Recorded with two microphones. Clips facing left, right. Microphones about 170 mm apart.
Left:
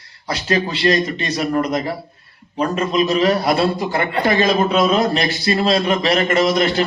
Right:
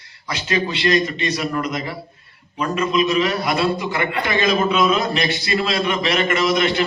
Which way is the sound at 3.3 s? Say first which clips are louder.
Left 4 dB; 30° left (ahead or behind).